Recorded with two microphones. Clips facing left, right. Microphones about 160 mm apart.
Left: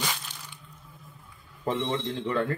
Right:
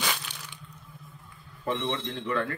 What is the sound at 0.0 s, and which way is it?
Crushing, 70° right (ahead or behind).